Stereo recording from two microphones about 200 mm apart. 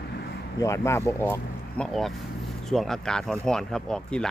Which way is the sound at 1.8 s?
Centre (ahead or behind).